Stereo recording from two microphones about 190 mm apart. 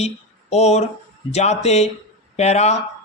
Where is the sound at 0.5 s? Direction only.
35° left (ahead or behind).